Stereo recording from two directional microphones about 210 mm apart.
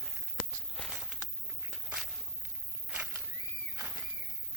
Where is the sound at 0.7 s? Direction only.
Centre (ahead or behind).